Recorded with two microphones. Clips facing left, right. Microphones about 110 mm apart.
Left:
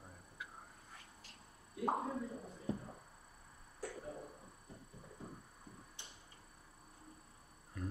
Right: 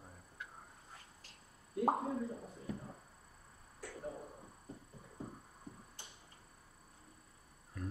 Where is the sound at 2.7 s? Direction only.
30° left (ahead or behind).